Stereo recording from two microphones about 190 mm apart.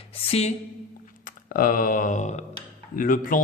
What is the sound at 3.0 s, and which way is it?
Speech, 45° left (ahead or behind).